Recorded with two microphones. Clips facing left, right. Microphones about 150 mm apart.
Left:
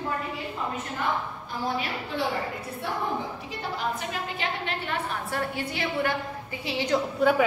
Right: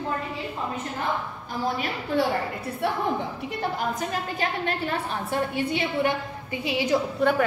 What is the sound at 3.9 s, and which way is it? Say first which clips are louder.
A woman's voice: right 3 dB; 45° right (ahead or behind).